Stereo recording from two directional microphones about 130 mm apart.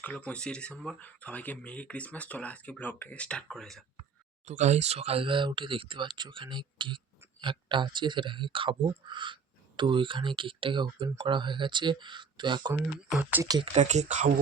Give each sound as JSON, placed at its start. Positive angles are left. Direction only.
{"t": 0.0, "sound": "speech", "side_deg": 10}
{"t": 4.4, "sound": "speech", "side_deg": -65}
{"t": 13.1, "sound": "speech", "side_deg": -10}
{"t": 13.7, "sound": "speech", "side_deg": -60}